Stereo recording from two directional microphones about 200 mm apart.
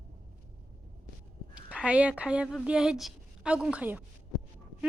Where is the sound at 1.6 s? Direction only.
5° right (ahead or behind).